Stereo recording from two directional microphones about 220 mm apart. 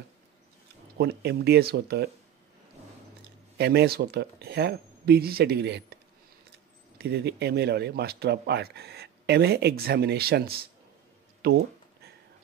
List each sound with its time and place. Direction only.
0.9 s speech: 50° right (ahead or behind)
3.5 s speech: 45° right (ahead or behind)
7.0 s speech: 50° right (ahead or behind)